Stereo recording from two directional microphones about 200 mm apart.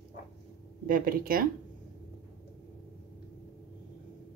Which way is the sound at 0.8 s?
45° right (ahead or behind).